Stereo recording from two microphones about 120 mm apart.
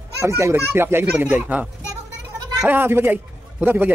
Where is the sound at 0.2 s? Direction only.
25° right (ahead or behind).